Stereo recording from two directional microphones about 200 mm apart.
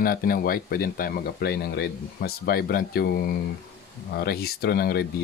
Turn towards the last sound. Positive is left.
turn(degrees=50)  # may be behind; listen again after turning